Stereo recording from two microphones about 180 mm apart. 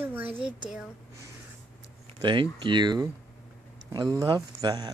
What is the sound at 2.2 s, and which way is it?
Speech, 25° right (ahead or behind).